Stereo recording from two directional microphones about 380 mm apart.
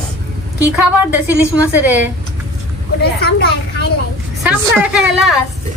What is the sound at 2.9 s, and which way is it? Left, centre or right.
Speech, left.